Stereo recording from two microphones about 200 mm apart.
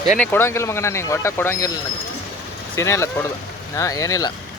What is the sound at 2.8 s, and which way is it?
Speech, 15° left (ahead or behind).